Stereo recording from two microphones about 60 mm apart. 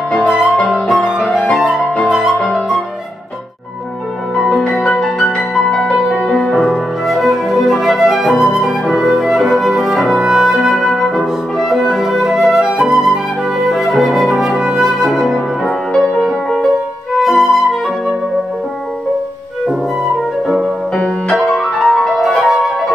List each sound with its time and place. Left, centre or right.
0.5 s music: centre
2.2 s music: centre
4.4 s music: centre
6.7 s flute: centre
19.7 s flute: centre
20.9 s music: left
21.4 s music: centre